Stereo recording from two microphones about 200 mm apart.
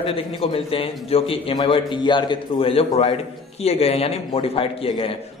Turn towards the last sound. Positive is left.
turn(degrees=30)  # may be behind; listen again after turning